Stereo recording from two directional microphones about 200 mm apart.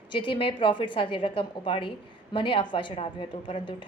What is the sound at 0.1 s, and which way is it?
A woman's voice, 25° left (ahead or behind).